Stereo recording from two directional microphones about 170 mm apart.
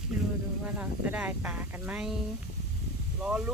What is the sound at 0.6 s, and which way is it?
Speech, 10° right (ahead or behind).